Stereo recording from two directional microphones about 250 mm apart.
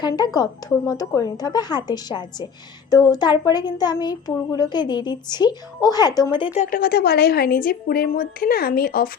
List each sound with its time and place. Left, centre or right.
0.9 s speech: centre
6.6 s a woman's voice: left